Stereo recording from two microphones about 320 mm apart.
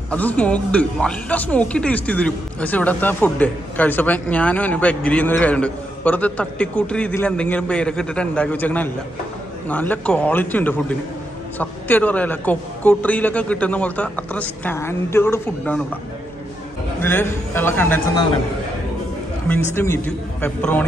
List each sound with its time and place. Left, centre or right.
0.1 s speech: centre
17.0 s a man's voice: centre
19.4 s speech: centre